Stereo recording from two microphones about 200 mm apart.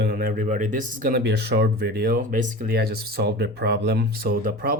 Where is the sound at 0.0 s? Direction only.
50° right (ahead or behind).